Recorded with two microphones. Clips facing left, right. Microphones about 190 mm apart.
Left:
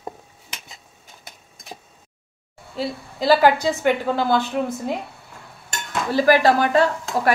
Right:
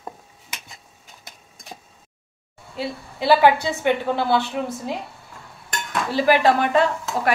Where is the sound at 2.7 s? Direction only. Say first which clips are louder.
Left 2 dB; 40° left (ahead or behind).